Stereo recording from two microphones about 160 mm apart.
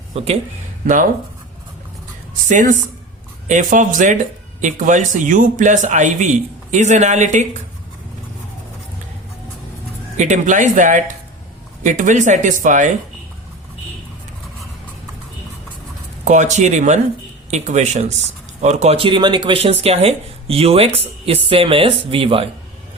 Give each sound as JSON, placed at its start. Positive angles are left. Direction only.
{"t": 0.1, "sound": "speech", "side_deg": -40}
{"t": 2.5, "sound": "speech", "side_deg": -55}
{"t": 10.2, "sound": "speech", "side_deg": -50}
{"t": 16.2, "sound": "speech", "side_deg": -50}